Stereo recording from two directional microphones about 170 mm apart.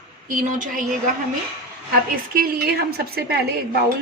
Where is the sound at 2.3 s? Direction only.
65° right (ahead or behind).